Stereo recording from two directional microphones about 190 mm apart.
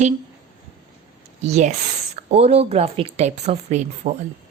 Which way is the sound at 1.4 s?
35° right (ahead or behind).